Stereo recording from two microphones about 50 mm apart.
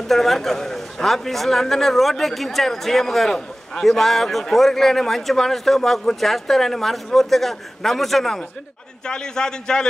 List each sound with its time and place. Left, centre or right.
0.0 s a man's voice: centre